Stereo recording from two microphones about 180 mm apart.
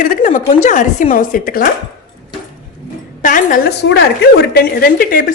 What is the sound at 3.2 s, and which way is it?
Speech, 50° left (ahead or behind).